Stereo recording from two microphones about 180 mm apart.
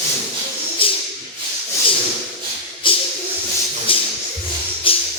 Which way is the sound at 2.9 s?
30° left (ahead or behind).